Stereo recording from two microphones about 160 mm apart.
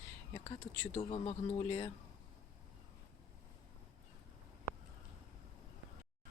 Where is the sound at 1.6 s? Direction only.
25° left (ahead or behind).